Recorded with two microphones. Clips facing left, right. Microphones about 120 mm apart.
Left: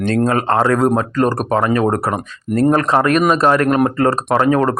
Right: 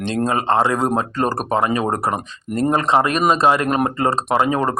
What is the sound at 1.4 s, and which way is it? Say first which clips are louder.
Speech: left 3 dB; 20° right (ahead or behind).